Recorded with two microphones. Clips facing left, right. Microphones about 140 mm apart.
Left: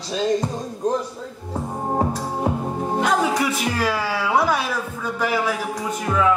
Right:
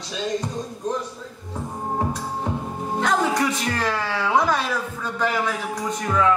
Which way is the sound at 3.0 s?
10° left (ahead or behind).